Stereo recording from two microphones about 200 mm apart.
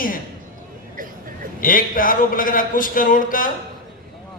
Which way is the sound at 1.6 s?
45° left (ahead or behind).